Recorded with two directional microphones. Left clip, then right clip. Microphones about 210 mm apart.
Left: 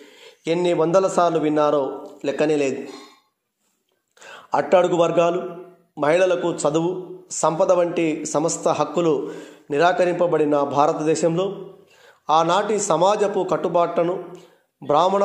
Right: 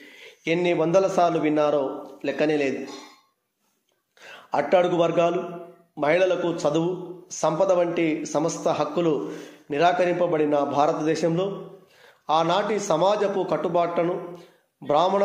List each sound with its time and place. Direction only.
0.0 s a man's voice: 25° left (ahead or behind)
4.2 s a man's voice: 30° left (ahead or behind)